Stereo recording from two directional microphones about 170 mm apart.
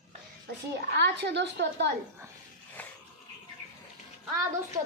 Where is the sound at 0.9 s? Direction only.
75° right (ahead or behind); by 1.9 s 90° right.